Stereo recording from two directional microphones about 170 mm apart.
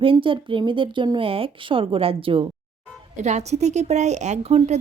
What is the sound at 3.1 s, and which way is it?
Speech, 45° right (ahead or behind).